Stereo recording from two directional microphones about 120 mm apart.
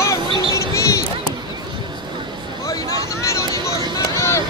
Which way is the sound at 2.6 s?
25° left (ahead or behind).